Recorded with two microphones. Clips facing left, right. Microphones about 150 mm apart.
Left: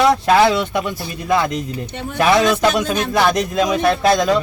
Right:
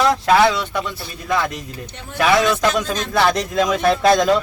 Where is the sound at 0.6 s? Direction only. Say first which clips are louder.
Left 4 dB; 15° left (ahead or behind).